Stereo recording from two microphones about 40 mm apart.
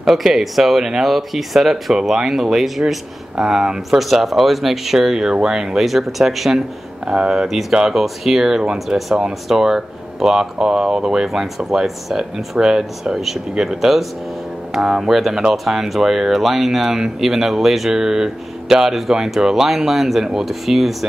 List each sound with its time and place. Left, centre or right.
0.0 s speech: centre
4.0 s speech: centre
7.1 s speech: centre
7.7 s speech: centre
8.7 s speech: centre